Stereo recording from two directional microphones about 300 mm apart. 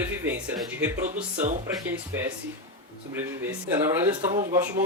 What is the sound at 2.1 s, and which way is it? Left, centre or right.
Speech, centre.